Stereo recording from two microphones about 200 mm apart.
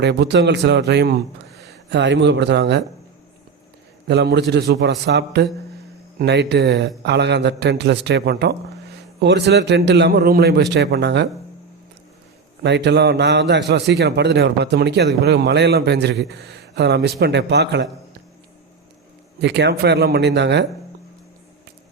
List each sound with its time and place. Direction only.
0.0 s a man's voice: 60° right (ahead or behind)
4.0 s a man's voice: 55° right (ahead or behind)
12.6 s a man's voice: 60° right (ahead or behind)
19.4 s a man's voice: 60° right (ahead or behind)